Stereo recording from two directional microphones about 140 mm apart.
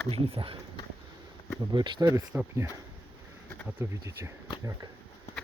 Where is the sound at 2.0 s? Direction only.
20° right (ahead or behind).